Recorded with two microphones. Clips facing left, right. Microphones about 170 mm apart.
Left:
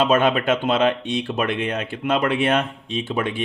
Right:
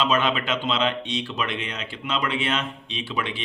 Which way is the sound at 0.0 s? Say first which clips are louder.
Left 5 dB; 50° left (ahead or behind).